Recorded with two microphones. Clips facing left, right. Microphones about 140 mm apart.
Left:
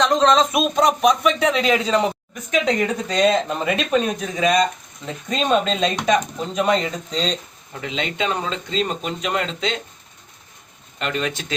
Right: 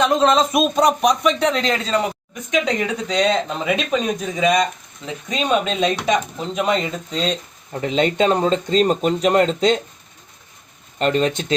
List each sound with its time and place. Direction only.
0.0 s speech: 5° right (ahead or behind); by 2.1 s 20° left (ahead or behind)
2.5 s speech: centre (ahead or behind)
7.7 s speech: 40° right (ahead or behind)
11.0 s speech: 35° right (ahead or behind)